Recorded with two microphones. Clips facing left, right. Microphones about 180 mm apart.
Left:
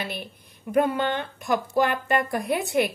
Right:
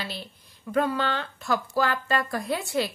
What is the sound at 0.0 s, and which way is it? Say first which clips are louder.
Speech: left 3 dB; 20° left (ahead or behind).